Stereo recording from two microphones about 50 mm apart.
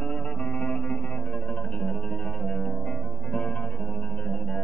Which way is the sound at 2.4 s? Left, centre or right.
Left.